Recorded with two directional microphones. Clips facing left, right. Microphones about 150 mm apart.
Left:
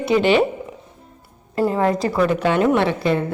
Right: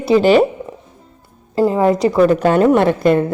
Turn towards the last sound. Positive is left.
turn(degrees=-50)  # may be behind; listen again after turning